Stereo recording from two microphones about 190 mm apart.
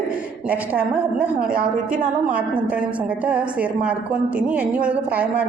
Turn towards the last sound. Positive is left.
turn(degrees=-5)  # may be behind; listen again after turning